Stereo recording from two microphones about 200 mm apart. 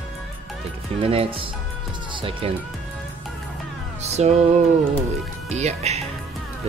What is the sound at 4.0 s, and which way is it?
Music, 35° right (ahead or behind).